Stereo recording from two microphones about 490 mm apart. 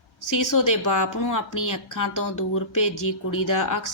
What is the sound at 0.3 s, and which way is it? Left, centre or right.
A woman's voice, left.